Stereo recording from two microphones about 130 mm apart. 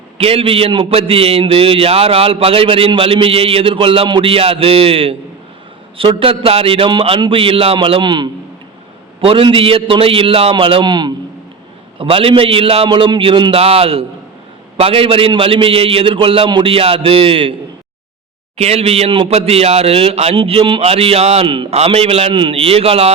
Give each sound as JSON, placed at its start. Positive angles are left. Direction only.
{"t": 0.2, "sound": "a man's voice", "side_deg": -45}
{"t": 18.5, "sound": "a man's voice", "side_deg": -55}
{"t": 21.4, "sound": "a man's voice", "side_deg": -40}
{"t": 21.7, "sound": "a man's voice", "side_deg": -50}